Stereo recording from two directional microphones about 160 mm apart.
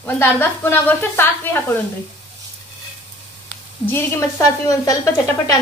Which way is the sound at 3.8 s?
15° left (ahead or behind).